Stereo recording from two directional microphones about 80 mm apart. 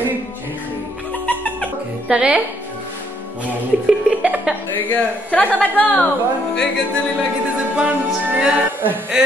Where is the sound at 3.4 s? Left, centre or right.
Centre.